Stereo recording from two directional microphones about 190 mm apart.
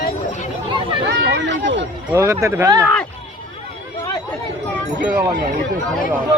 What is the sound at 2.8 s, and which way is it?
Speech, 5° left (ahead or behind).